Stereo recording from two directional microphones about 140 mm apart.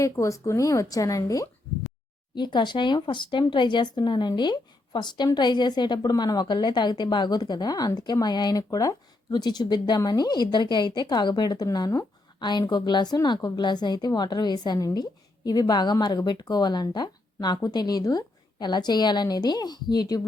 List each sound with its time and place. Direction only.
0.0 s speech: 25° left (ahead or behind)